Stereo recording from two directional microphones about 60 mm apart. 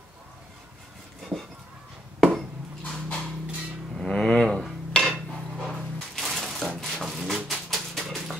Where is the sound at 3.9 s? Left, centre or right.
Centre.